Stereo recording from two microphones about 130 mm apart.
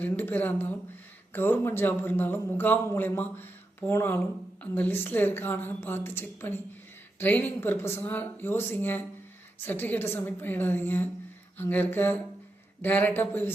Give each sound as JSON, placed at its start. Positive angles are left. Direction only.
{"t": 0.0, "sound": "a man's voice", "side_deg": 15}